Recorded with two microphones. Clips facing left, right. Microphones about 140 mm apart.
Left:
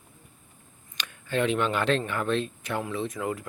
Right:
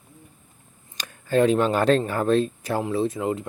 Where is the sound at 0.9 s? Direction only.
40° right (ahead or behind).